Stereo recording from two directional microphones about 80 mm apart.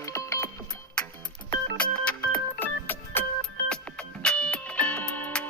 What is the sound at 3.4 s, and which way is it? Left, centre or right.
Music, centre.